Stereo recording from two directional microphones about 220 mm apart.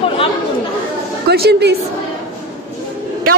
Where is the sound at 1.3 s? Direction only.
50° right (ahead or behind).